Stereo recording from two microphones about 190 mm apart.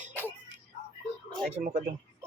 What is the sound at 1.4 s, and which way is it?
Speech, 35° right (ahead or behind).